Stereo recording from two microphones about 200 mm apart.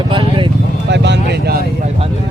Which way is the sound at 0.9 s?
60° right (ahead or behind).